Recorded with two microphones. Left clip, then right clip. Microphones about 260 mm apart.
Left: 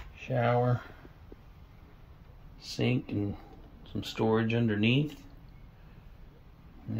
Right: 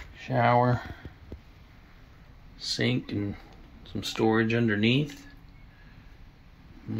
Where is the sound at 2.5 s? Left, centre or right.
Centre.